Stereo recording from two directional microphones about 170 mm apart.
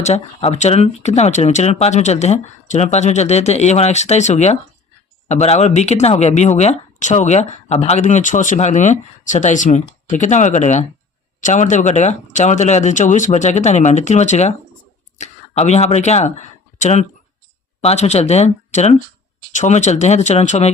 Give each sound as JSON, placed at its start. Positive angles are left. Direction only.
{"t": 0.0, "sound": "speech", "side_deg": 40}